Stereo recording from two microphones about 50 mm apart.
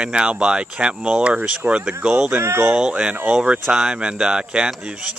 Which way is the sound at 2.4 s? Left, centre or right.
Right.